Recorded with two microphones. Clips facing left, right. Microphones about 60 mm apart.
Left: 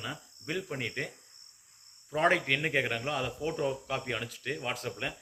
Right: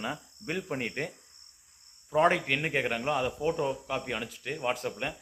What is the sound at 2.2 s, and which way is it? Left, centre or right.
Speech, centre.